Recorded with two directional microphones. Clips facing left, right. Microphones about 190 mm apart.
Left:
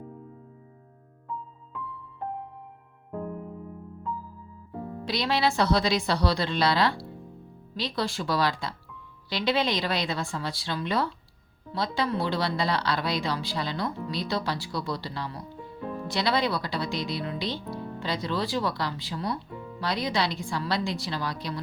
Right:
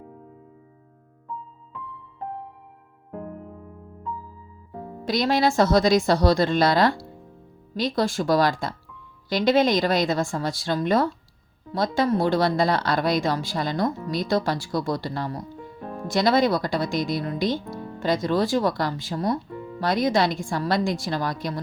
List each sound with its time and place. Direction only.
5.0 s speech: 45° right (ahead or behind)